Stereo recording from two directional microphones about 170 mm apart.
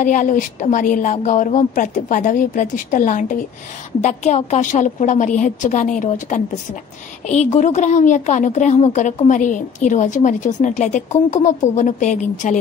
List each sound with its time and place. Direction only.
0.0 s a woman's voice: 50° left (ahead or behind)